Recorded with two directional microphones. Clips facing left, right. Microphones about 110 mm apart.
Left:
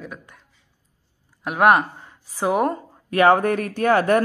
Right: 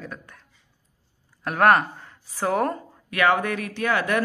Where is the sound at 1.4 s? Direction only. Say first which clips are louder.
Left 2 dB; 10° left (ahead or behind).